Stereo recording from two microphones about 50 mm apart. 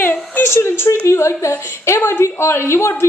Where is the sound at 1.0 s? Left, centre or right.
Left.